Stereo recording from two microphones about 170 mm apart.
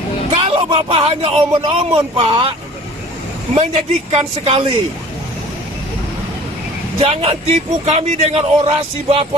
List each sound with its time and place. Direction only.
0.4 s a man's voice: 35° right (ahead or behind)
7.0 s a man's voice: 35° right (ahead or behind)